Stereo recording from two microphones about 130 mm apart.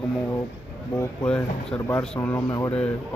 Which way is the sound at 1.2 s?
5° left (ahead or behind).